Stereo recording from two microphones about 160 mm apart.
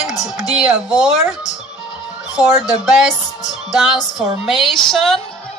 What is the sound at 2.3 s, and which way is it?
Speech, 5° right (ahead or behind).